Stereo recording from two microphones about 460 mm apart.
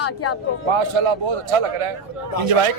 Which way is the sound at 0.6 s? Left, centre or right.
Right.